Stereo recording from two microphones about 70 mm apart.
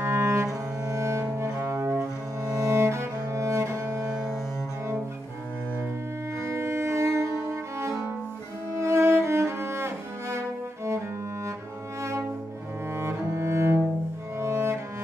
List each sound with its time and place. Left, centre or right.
0.0 s cello: right
6.5 s cello: right
12.9 s cello: right
14.4 s music: right